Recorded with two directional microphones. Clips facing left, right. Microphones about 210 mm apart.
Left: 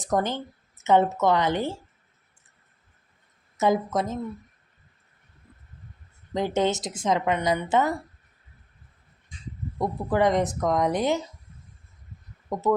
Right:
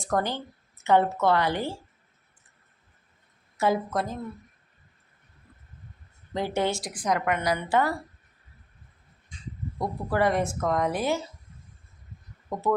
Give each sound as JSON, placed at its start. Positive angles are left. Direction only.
{"t": 0.0, "sound": "a woman's voice", "side_deg": 20}
{"t": 3.9, "sound": "a woman's voice", "side_deg": 20}
{"t": 6.3, "sound": "a woman's voice", "side_deg": 20}
{"t": 9.7, "sound": "a woman's voice", "side_deg": 20}
{"t": 12.5, "sound": "speech", "side_deg": 20}